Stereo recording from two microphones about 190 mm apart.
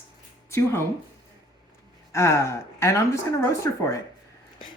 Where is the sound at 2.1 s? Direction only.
15° left (ahead or behind).